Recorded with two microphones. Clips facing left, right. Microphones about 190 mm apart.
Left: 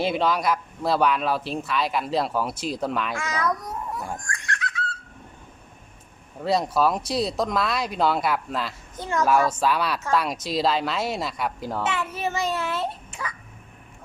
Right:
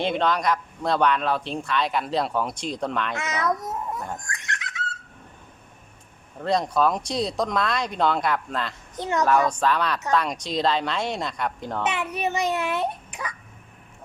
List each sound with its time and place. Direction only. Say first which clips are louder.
0.0 s speech: even; 5° left (ahead or behind)
3.2 s a child's voice: right 1 dB; 20° right (ahead or behind)
4.3 s a sound: left 3 dB; 20° right (ahead or behind)
6.4 s speech: even; 5° left (ahead or behind)
9.0 s a child's voice: right 1 dB; 20° right (ahead or behind)
9.5 s speech: even; 10° left (ahead or behind)
11.8 s a child's voice: right 1 dB; 20° right (ahead or behind)